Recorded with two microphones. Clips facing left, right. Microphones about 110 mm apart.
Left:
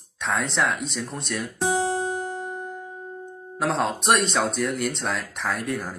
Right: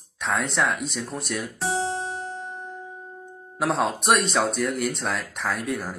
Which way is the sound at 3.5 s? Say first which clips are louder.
Even; centre (ahead or behind).